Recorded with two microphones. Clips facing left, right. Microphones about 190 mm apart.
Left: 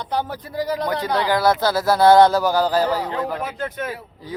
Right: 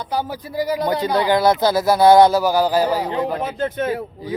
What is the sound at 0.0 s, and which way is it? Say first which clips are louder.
Speech: right 1 dB; 5° right (ahead or behind).